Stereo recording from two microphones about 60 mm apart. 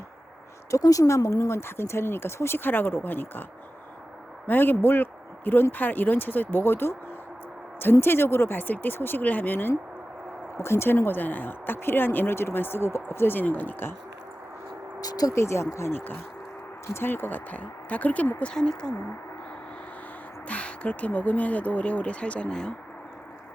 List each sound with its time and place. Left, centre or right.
0.7 s speech: left
4.4 s speech: left
8.0 s speech: left
15.0 s speech: left
15.4 s speech: left
15.9 s speech: left; by 18.9 s centre
20.5 s speech: left